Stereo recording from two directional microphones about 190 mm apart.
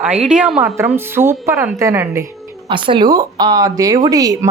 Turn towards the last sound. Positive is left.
turn(degrees=-20)  # may be behind; listen again after turning